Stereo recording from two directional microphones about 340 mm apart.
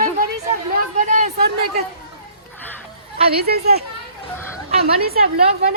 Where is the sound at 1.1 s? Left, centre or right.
Right.